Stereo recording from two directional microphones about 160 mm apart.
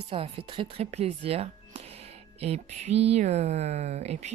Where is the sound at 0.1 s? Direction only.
35° right (ahead or behind).